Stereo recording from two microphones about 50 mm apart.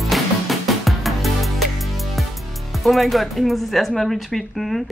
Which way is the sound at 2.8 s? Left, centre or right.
Centre.